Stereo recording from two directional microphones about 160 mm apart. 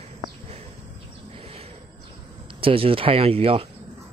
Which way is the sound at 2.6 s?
35° right (ahead or behind).